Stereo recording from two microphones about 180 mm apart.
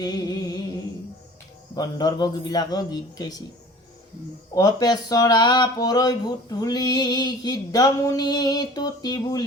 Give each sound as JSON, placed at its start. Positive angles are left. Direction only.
{"t": 0.0, "sound": "music", "side_deg": 25}
{"t": 1.7, "sound": "speech", "side_deg": 20}
{"t": 4.5, "sound": "speech", "side_deg": 20}